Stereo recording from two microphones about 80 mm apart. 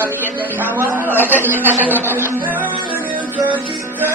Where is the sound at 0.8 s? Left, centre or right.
Right.